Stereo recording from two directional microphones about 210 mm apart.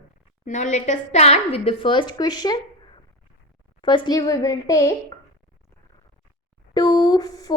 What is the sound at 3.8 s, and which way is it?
A woman's voice, 20° left (ahead or behind).